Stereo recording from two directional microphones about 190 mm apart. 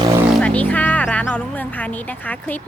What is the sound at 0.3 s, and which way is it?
Speech, 5° left (ahead or behind).